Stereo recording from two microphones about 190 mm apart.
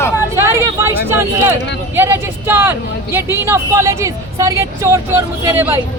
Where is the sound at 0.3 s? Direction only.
15° right (ahead or behind).